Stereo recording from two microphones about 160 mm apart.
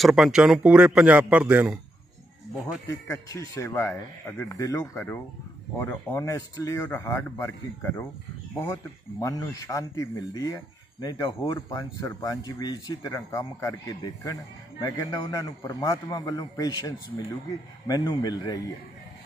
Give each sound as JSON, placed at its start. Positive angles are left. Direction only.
{"t": 0.0, "sound": "speech", "side_deg": -5}
{"t": 2.9, "sound": "speech", "side_deg": 20}
{"t": 9.2, "sound": "speech", "side_deg": 20}